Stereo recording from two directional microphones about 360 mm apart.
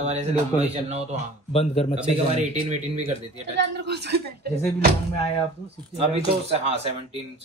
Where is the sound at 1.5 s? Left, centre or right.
Centre.